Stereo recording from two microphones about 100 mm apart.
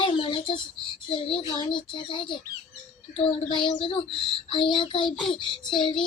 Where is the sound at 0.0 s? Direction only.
60° left (ahead or behind).